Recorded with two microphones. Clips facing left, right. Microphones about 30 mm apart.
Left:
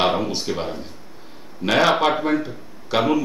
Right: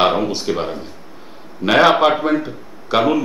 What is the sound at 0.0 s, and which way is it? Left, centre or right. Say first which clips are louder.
Speech: right 4 dB; centre.